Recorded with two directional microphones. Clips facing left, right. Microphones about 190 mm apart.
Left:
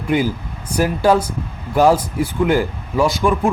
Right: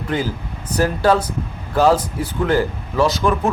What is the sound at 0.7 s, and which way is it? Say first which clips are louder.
Speech: left 1 dB; 10° left (ahead or behind).